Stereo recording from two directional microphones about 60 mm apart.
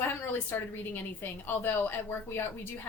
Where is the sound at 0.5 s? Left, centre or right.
Left.